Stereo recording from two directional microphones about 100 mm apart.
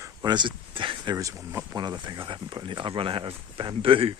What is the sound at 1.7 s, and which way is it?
Speech, 45° right (ahead or behind).